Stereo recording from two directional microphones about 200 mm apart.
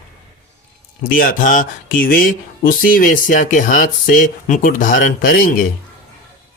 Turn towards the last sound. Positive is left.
turn(degrees=45)  # may be behind; listen again after turning